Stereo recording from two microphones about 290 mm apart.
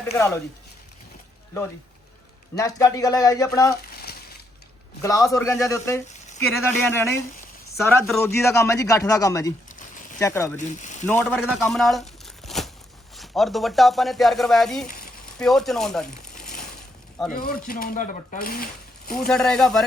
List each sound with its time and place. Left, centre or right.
0.0 s a man's voice: centre
2.6 s a man's voice: centre
5.0 s a man's voice: centre
9.7 s a sound: left
10.2 s a man's voice: centre
17.3 s speech: left
19.3 s speech: centre